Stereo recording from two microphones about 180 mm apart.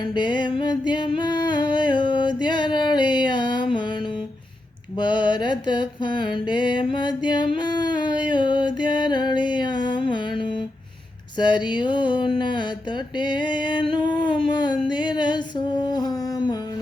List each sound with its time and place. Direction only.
0.0 s music: 25° left (ahead or behind)
4.9 s mantra: 25° left (ahead or behind)
11.3 s music: 25° left (ahead or behind)
13.1 s a sound: 25° left (ahead or behind)